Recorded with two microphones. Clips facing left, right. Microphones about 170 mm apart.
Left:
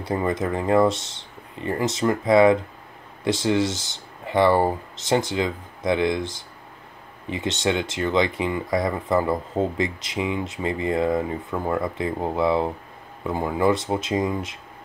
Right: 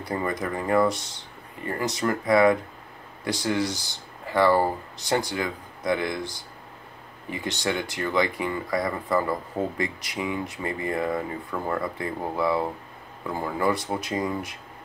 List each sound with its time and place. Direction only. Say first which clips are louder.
0.0 s speech: left 4 dB; 20° left (ahead or behind)